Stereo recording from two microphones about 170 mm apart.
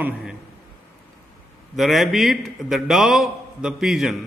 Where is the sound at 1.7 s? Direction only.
Centre (ahead or behind).